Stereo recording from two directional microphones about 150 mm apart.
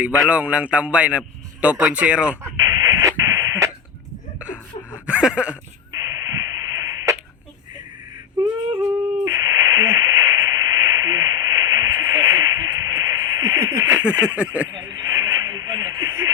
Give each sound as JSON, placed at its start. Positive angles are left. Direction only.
{"t": 0.3, "sound": "a man's voice", "side_deg": -10}
{"t": 2.6, "sound": "radio", "side_deg": -25}
{"t": 4.4, "sound": "a sound", "side_deg": -10}
{"t": 6.0, "sound": "radio", "side_deg": -20}
{"t": 8.4, "sound": "a sound", "side_deg": -30}
{"t": 9.2, "sound": "radio", "side_deg": -25}
{"t": 13.8, "sound": "a sound", "side_deg": -10}
{"t": 14.3, "sound": "a man's voice", "side_deg": -10}
{"t": 14.8, "sound": "radio", "side_deg": -20}